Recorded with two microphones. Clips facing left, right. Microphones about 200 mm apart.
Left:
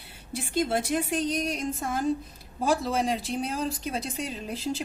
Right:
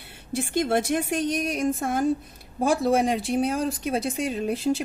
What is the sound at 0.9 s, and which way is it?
Speech, 55° right (ahead or behind).